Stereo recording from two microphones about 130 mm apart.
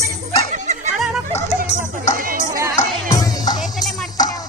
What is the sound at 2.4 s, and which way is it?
Music, 25° right (ahead or behind).